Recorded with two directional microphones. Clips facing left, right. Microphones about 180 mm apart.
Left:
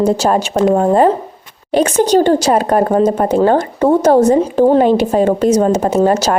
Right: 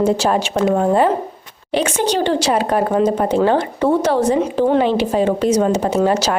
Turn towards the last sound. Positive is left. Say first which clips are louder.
# left 4 dB
turn(degrees=45)  # may be behind; listen again after turning